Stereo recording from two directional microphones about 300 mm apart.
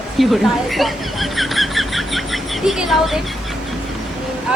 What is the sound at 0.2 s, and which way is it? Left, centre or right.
Speech, centre.